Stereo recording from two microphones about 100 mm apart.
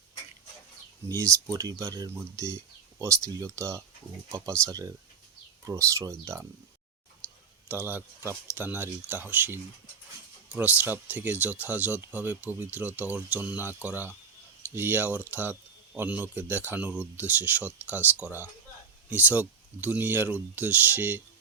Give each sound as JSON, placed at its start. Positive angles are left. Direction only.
{"t": 1.0, "sound": "speech", "side_deg": -30}
{"t": 7.7, "sound": "speech", "side_deg": -20}